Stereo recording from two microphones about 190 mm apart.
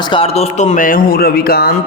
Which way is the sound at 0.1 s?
30° left (ahead or behind).